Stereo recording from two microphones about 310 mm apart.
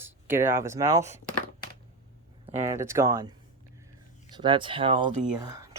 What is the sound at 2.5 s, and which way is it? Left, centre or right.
Speech, centre.